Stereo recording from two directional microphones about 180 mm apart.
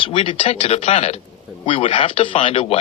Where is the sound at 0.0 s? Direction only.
30° left (ahead or behind).